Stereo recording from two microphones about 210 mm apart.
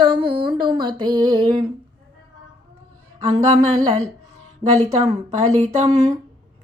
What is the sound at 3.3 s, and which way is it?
Speech, 30° right (ahead or behind).